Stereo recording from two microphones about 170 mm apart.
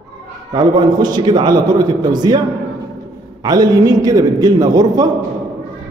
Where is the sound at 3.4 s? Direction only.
20° right (ahead or behind).